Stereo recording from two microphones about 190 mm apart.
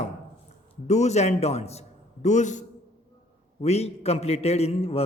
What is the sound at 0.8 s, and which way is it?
A man's voice, 35° left (ahead or behind).